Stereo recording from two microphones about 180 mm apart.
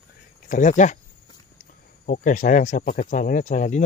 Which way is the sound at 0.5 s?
45° left (ahead or behind).